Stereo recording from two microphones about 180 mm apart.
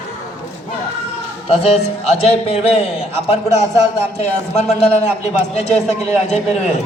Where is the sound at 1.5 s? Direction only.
35° left (ahead or behind).